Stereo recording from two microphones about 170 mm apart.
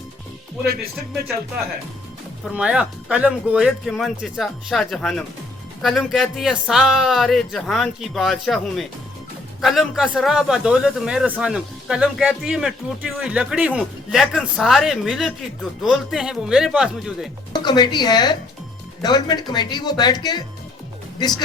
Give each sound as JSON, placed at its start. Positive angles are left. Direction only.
{"t": 2.5, "sound": "a man's voice", "side_deg": -5}
{"t": 17.5, "sound": "speech", "side_deg": 25}